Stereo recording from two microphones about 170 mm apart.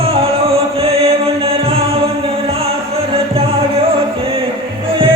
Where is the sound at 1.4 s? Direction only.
35° right (ahead or behind).